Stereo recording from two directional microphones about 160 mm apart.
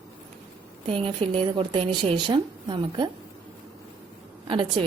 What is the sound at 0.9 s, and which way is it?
A woman's voice, 35° right (ahead or behind).